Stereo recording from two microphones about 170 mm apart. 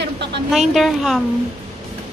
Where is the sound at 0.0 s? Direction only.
90° right.